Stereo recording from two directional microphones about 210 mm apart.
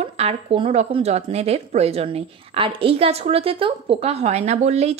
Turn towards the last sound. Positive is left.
turn(degrees=-30)  # may be behind; listen again after turning